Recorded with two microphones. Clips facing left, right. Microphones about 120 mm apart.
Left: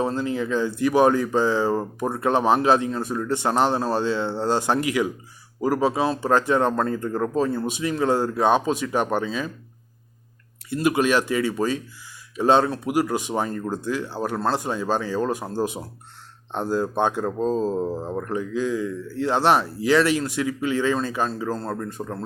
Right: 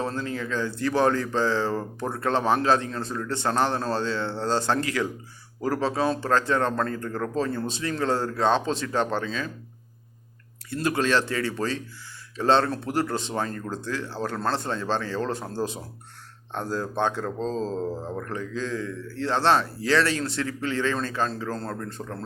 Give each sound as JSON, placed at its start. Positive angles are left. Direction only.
{"t": 0.0, "sound": "speech", "side_deg": 15}
{"t": 10.8, "sound": "speech", "side_deg": 15}